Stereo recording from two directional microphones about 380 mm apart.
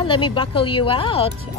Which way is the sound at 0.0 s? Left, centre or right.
Centre.